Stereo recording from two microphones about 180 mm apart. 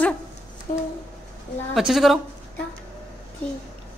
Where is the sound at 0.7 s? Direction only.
50° left (ahead or behind).